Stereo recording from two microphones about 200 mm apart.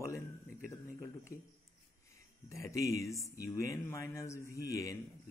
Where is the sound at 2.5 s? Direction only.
15° left (ahead or behind).